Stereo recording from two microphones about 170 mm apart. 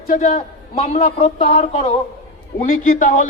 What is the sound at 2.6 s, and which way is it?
Speech, 50° left (ahead or behind).